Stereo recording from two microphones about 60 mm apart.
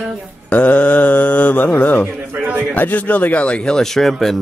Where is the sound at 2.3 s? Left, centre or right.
Right.